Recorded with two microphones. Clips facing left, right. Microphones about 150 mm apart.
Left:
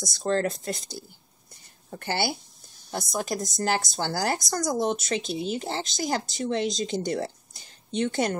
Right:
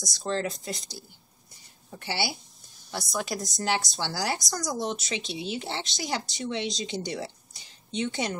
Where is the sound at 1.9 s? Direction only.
50° left (ahead or behind).